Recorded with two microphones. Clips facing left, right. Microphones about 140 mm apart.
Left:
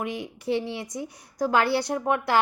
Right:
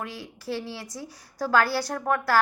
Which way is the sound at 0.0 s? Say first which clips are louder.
Left 5 dB; 20° left (ahead or behind).